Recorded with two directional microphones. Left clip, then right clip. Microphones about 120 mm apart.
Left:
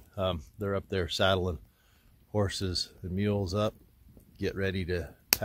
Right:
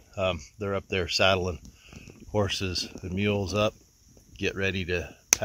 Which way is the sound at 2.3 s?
30° right (ahead or behind).